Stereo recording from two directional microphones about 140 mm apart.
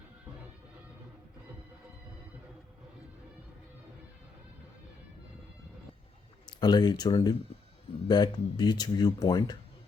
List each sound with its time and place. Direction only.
6.6 s speech: 30° left (ahead or behind)